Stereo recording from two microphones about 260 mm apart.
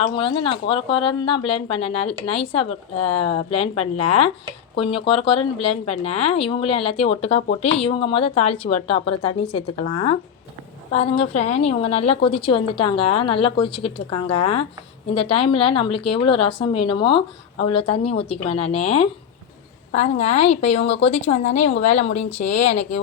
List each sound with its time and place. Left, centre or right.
0.0 s a woman's voice: centre